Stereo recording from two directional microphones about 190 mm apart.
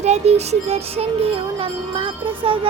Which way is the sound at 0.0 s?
35° right (ahead or behind).